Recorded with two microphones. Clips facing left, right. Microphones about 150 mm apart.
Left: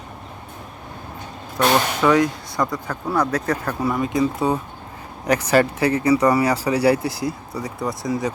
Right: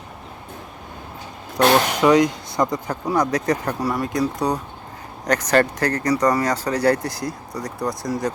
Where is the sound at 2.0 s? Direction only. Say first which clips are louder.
Right 2 dB; 15° right (ahead or behind).